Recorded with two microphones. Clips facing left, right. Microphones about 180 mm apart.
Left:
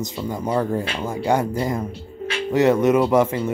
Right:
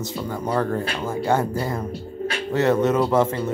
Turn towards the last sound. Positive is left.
turn(degrees=10)  # may be behind; listen again after turning